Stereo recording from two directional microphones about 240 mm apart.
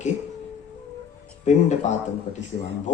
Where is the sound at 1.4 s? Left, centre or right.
Left.